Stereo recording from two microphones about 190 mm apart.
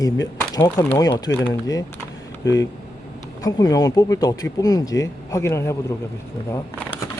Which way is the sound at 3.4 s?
20° left (ahead or behind).